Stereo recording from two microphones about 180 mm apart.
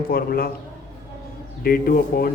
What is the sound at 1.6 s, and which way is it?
Speech, 55° left (ahead or behind).